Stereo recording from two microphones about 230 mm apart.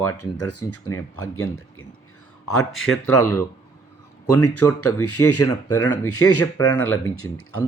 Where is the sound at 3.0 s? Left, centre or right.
Left.